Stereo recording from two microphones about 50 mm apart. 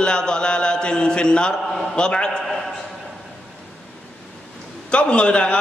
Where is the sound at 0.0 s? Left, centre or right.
Centre.